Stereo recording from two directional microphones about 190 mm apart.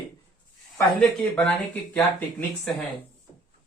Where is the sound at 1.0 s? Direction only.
5° left (ahead or behind).